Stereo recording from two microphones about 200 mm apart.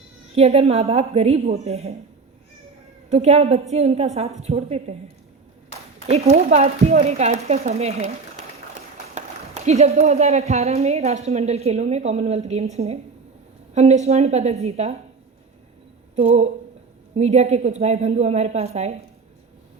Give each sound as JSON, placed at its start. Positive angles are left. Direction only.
{"t": 0.3, "sound": "a woman's voice", "side_deg": -30}
{"t": 3.1, "sound": "a woman's voice", "side_deg": -30}
{"t": 6.1, "sound": "a woman's voice", "side_deg": -30}
{"t": 9.1, "sound": "a woman's voice", "side_deg": -35}
{"t": 16.1, "sound": "a woman's voice", "side_deg": -35}